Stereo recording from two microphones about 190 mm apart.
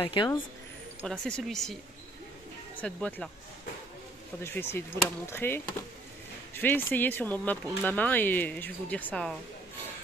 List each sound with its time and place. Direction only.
0.0 s a woman's voice: 25° left (ahead or behind)
1.0 s speech: 5° left (ahead or behind)
2.8 s speech: 5° left (ahead or behind)
4.4 s speech: 10° left (ahead or behind)